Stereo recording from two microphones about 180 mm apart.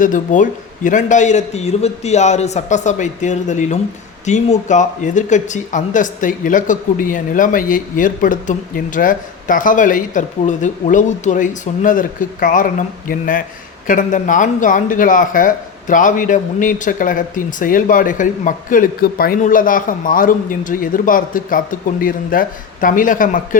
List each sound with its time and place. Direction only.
0.0 s a man's voice: 45° left (ahead or behind)